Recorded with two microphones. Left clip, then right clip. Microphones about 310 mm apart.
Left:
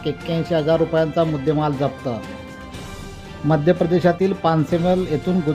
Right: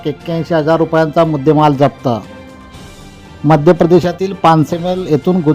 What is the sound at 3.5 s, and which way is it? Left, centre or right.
Speech, centre.